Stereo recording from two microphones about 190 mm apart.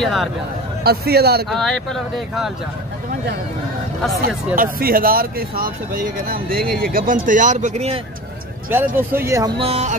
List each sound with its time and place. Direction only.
0.0 s speech: centre (ahead or behind)
0.8 s a man's voice: 55° right (ahead or behind)
1.5 s speech: centre (ahead or behind)
4.6 s speech: 50° right (ahead or behind); by 8.0 s 35° right (ahead or behind)
8.6 s speech: 10° right (ahead or behind)
9.6 s speech: 35° right (ahead or behind)